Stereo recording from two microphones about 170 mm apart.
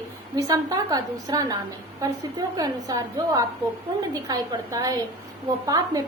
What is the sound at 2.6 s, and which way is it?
A woman's voice, 20° right (ahead or behind).